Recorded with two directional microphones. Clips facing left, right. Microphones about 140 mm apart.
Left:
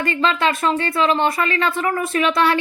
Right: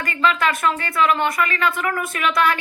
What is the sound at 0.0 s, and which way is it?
A woman's voice, 25° left (ahead or behind).